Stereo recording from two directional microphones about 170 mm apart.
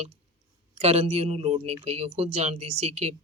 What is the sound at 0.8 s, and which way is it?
Speech, 40° right (ahead or behind).